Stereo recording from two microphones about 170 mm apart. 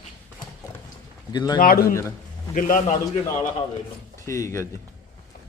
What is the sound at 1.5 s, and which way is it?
A man's voice, 55° left (ahead or behind).